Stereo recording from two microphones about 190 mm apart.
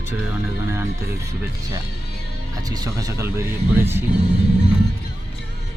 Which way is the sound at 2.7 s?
20° right (ahead or behind).